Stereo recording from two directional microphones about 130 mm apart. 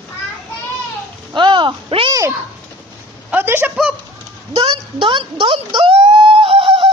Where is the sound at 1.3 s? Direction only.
40° right (ahead or behind).